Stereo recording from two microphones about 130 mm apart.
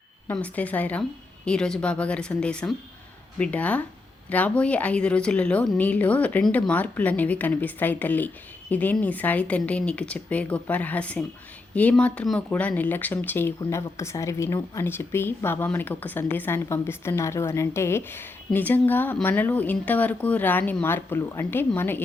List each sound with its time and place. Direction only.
0.3 s a woman's voice: 10° left (ahead or behind)